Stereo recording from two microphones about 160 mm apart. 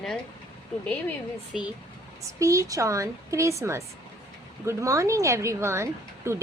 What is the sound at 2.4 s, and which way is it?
Speech, 20° right (ahead or behind).